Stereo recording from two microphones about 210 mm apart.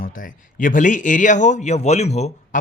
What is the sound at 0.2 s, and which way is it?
Speech, 40° left (ahead or behind).